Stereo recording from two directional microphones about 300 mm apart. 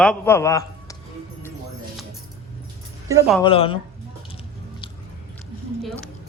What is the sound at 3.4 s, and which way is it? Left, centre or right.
Speech, centre.